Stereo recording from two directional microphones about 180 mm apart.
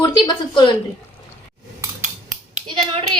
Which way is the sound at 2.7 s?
30° right (ahead or behind).